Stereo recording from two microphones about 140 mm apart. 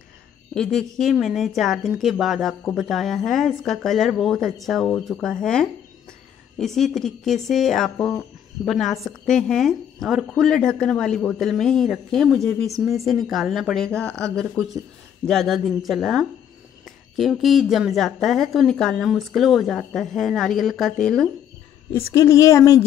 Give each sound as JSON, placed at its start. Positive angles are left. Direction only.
{"t": 0.6, "sound": "a woman's voice", "side_deg": 5}
{"t": 21.9, "sound": "a woman's voice", "side_deg": 20}